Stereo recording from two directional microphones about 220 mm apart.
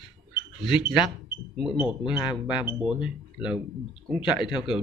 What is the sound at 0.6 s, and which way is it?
Speech, 5° right (ahead or behind).